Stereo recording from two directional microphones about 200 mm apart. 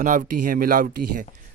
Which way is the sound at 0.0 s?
40° right (ahead or behind).